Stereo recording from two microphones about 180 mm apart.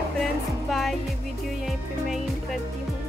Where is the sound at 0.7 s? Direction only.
Centre (ahead or behind).